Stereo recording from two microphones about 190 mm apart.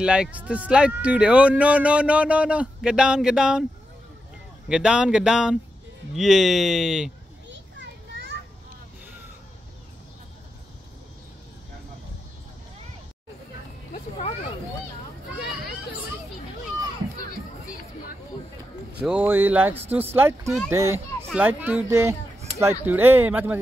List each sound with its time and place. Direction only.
0.0 s speech: 5° right (ahead or behind)
4.6 s speech: 5° right (ahead or behind)
7.4 s children playing: 75° right (ahead or behind)
13.9 s a sound: 35° left (ahead or behind)
18.9 s a child's voice: 5° right (ahead or behind)